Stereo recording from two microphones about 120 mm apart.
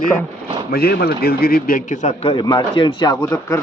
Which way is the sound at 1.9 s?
75° left (ahead or behind).